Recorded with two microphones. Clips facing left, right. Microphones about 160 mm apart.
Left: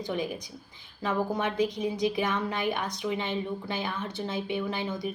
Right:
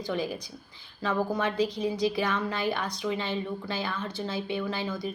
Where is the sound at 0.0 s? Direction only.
20° left (ahead or behind).